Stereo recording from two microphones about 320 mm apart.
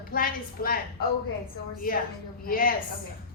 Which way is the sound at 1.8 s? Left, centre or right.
Left.